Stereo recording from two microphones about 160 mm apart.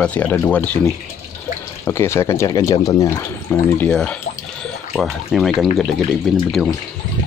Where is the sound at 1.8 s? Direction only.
15° left (ahead or behind); by 6.4 s centre (ahead or behind).